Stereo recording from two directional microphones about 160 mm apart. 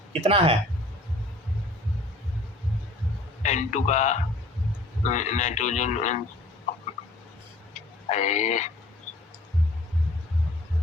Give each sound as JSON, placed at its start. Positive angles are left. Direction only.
{"t": 0.1, "sound": "speech", "side_deg": -40}
{"t": 3.4, "sound": "speech", "side_deg": 45}
{"t": 8.1, "sound": "speech", "side_deg": 45}